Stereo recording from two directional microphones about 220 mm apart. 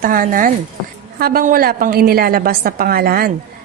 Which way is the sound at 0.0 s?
40° right (ahead or behind).